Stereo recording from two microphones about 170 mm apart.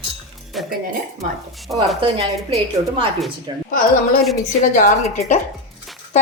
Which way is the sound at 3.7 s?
55° left (ahead or behind).